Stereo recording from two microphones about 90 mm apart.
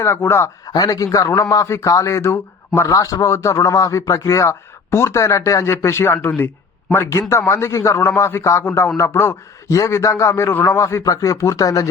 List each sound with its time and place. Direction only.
0.0 s speech: 30° left (ahead or behind)
0.7 s speech: 45° left (ahead or behind); by 2.9 s 30° left (ahead or behind)
2.9 s speech: 40° left (ahead or behind)